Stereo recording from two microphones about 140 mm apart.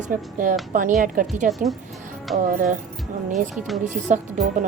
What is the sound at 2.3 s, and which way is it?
A woman's voice, 65° right (ahead or behind).